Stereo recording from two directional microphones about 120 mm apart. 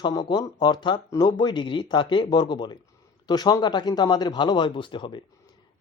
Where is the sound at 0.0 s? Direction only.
35° left (ahead or behind).